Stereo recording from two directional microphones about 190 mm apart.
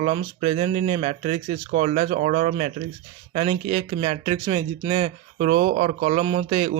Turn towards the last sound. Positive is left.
turn(degrees=-40)  # may be behind; listen again after turning